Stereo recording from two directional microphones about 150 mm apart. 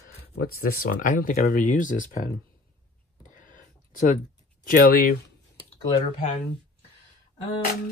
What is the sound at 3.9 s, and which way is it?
Speech, 60° left (ahead or behind).